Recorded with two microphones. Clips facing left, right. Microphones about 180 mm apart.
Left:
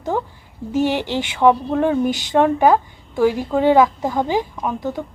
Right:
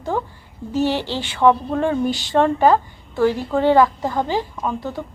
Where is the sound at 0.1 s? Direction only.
15° left (ahead or behind).